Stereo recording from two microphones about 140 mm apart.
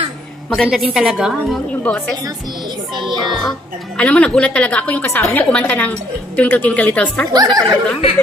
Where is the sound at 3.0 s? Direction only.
35° right (ahead or behind).